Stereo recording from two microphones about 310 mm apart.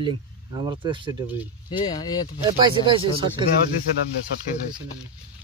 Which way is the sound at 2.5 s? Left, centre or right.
Centre.